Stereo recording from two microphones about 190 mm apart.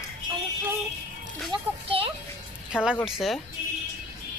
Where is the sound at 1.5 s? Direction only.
30° right (ahead or behind).